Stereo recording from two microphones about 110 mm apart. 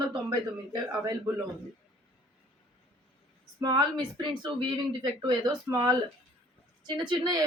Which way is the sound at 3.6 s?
40° right (ahead or behind).